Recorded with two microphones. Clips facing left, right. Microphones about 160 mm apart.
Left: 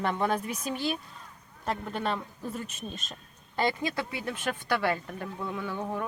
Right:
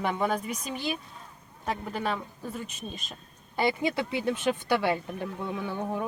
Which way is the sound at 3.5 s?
15° right (ahead or behind).